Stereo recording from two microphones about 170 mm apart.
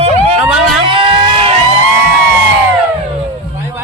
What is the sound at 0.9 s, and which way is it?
Vehicle, 30° right (ahead or behind).